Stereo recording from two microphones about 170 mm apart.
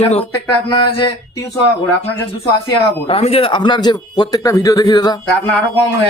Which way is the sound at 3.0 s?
35° left (ahead or behind).